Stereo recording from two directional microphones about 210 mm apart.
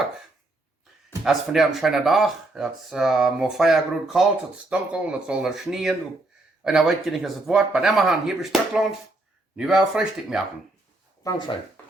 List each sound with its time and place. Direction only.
1.2 s speech: centre (ahead or behind)
11.2 s speech: 20° left (ahead or behind)